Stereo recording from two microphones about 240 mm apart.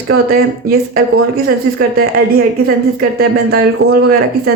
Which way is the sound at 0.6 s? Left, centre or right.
Right.